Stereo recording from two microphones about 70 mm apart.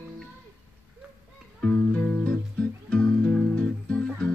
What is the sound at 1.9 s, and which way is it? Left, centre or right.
Music, centre.